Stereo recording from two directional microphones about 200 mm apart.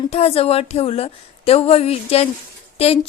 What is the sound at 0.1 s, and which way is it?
Speech, 30° left (ahead or behind).